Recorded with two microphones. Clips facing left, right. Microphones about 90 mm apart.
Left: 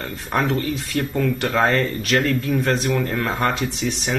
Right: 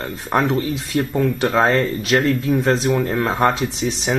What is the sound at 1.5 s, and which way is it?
Speech, 30° right (ahead or behind).